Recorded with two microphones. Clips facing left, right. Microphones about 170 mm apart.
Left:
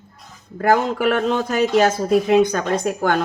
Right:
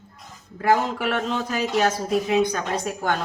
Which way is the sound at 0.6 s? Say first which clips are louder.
Left 4 dB; 55° left (ahead or behind).